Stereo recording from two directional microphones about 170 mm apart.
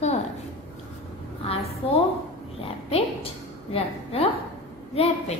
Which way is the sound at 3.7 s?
35° left (ahead or behind).